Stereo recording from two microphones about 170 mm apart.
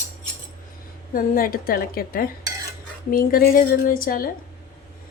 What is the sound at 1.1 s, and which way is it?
A woman's voice, 55° left (ahead or behind).